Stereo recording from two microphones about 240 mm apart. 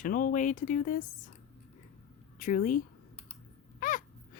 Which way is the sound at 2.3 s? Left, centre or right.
Left.